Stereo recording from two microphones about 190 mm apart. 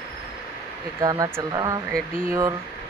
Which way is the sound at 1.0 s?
20° right (ahead or behind).